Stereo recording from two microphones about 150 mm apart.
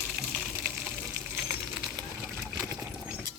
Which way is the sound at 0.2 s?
5° right (ahead or behind).